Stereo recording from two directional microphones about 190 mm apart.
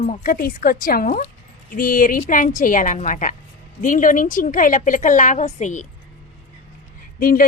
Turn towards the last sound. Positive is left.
turn(degrees=50)  # may be behind; listen again after turning